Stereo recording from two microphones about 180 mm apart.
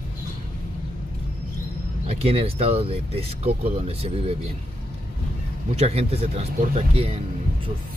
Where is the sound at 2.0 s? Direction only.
35° right (ahead or behind).